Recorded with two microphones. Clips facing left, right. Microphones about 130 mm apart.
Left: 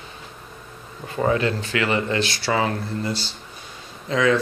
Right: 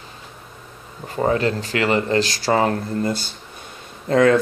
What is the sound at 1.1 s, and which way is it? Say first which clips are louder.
Speech: right 2 dB; 35° right (ahead or behind).